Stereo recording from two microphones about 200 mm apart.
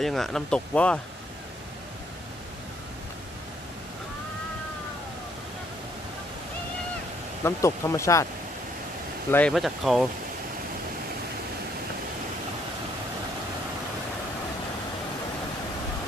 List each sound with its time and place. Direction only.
0.0 s speech: centre (ahead or behind)
7.4 s speech: 15° left (ahead or behind)
9.3 s speech: 5° left (ahead or behind)